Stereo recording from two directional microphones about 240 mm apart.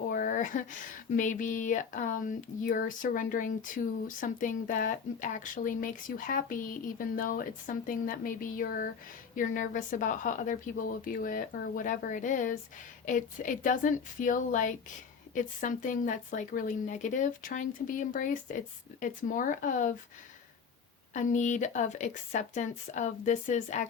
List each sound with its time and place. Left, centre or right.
0.1 s speech: left
21.1 s speech: left